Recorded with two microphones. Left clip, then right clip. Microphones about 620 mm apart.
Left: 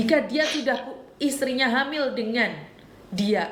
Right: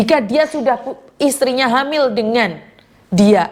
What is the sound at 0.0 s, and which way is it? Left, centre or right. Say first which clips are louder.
A woman's voice: right 8 dB; right.